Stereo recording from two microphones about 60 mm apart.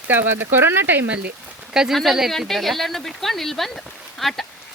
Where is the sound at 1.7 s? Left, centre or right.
Centre.